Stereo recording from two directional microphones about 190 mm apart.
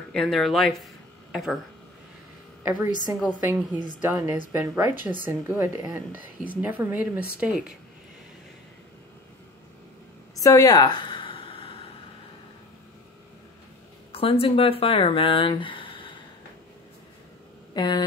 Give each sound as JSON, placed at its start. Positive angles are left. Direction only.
{"t": 0.1, "sound": "speech", "side_deg": 0}
{"t": 2.6, "sound": "a woman's voice", "side_deg": -10}
{"t": 10.3, "sound": "a sound", "side_deg": 20}
{"t": 14.1, "sound": "speech", "side_deg": 30}
{"t": 17.7, "sound": "speech", "side_deg": 25}